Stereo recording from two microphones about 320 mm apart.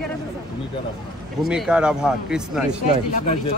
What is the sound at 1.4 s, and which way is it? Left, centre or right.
Speech, centre.